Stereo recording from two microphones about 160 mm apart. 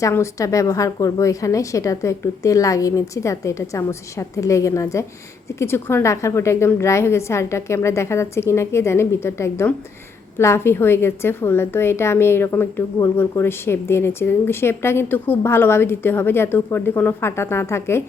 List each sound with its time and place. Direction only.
0.0 s a woman's voice: 20° left (ahead or behind)